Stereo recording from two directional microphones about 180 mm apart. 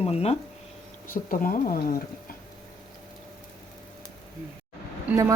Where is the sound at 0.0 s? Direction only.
35° left (ahead or behind).